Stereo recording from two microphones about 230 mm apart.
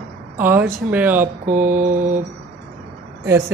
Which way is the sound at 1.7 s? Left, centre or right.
Right.